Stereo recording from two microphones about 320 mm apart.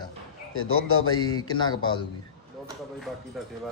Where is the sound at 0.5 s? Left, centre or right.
Left.